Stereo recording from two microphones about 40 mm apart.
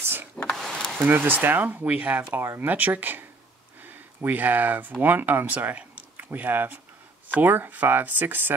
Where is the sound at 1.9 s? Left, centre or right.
Right.